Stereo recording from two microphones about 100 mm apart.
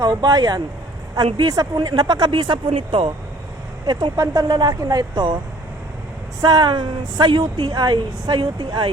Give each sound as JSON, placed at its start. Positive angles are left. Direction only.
{"t": 0.0, "sound": "speech", "side_deg": -45}
{"t": 4.2, "sound": "speech", "side_deg": -40}
{"t": 6.4, "sound": "speech", "side_deg": -45}
{"t": 7.7, "sound": "speech", "side_deg": -45}